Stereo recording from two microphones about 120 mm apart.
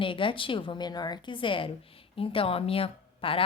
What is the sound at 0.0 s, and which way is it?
A woman's voice, 45° left (ahead or behind).